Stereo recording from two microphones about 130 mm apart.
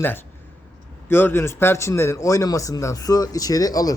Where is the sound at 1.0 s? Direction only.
15° left (ahead or behind).